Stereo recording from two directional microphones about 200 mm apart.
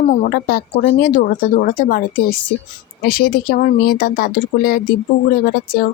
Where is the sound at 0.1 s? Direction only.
50° left (ahead or behind).